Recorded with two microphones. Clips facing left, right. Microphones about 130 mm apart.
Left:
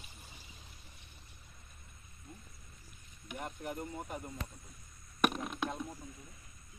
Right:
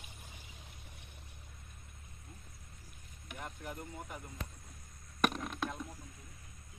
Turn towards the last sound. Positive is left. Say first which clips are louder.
# left 1 dB
turn(degrees=5)  # may be behind; listen again after turning